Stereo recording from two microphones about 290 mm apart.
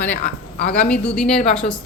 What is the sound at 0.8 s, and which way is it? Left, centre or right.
A woman's voice, centre.